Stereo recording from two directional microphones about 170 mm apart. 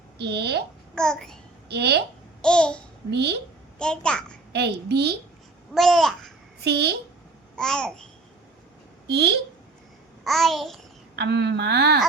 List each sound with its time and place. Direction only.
0.2 s speech: 80° right
0.9 s babbling: 5° left (ahead or behind)
1.7 s speech: 75° right (ahead or behind)
2.4 s babbling: 5° left (ahead or behind)
3.1 s speech: 80° right
3.8 s babbling: 5° left (ahead or behind)
4.5 s speech: 75° right (ahead or behind)
5.7 s babbling: centre (ahead or behind)
6.7 s speech: 75° right (ahead or behind)
7.5 s babbling: 5° left (ahead or behind)
9.0 s speech: 75° right (ahead or behind)
10.2 s babbling: centre (ahead or behind)
11.2 s speech: 80° right